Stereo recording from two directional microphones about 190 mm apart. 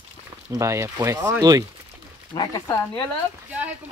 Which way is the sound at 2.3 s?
20° left (ahead or behind).